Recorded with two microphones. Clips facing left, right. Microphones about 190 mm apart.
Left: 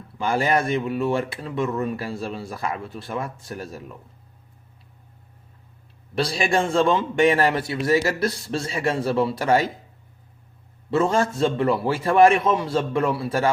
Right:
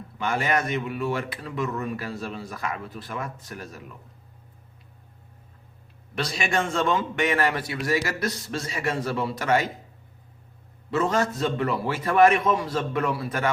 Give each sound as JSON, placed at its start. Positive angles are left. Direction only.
{"t": 0.2, "sound": "speech", "side_deg": 30}
{"t": 6.1, "sound": "a man's voice", "side_deg": 30}
{"t": 10.9, "sound": "speech", "side_deg": 30}